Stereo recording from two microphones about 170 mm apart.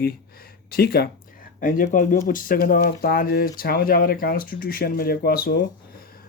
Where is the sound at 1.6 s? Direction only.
50° left (ahead or behind).